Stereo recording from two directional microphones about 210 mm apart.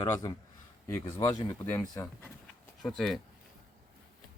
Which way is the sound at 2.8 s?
Centre (ahead or behind).